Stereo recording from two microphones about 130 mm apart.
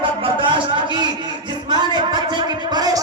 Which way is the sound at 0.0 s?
40° right (ahead or behind).